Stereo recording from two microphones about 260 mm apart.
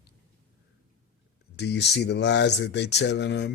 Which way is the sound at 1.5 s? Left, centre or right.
Left.